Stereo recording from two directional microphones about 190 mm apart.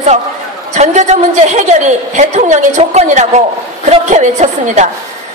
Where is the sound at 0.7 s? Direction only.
35° right (ahead or behind).